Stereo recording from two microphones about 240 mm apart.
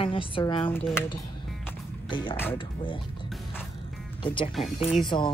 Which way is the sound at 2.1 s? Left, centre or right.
Centre.